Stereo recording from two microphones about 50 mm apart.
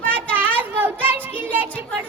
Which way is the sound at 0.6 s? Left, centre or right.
Right.